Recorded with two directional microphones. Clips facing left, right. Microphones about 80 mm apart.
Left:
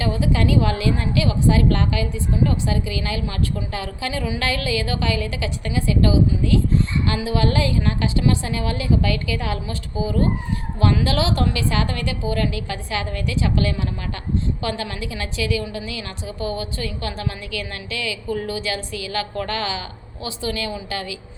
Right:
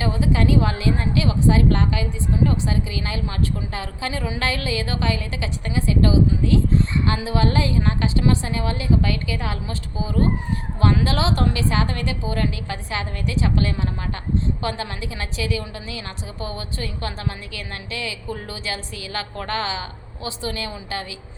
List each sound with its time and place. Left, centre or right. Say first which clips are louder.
0.0 s a woman's voice: even; right